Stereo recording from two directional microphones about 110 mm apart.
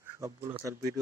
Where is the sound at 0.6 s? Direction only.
35° right (ahead or behind).